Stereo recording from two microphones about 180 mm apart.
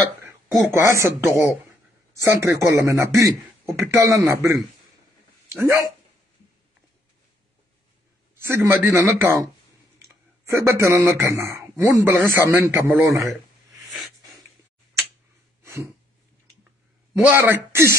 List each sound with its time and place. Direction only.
0.7 s a man's voice: 15° right (ahead or behind)
8.4 s a man's voice: 15° right (ahead or behind)
13.8 s a sound: centre (ahead or behind)
17.2 s a man's voice: 10° right (ahead or behind)